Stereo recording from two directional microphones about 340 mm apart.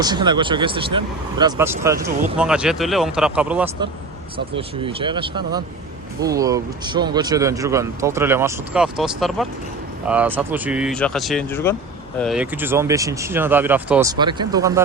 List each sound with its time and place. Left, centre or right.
0.0 s speech: centre
4.5 s speech: centre